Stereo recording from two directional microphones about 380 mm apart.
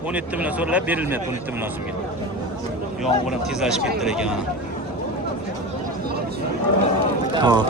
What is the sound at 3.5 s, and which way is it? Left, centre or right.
Speech, centre.